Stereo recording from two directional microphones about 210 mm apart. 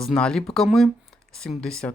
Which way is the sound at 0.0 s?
5° left (ahead or behind).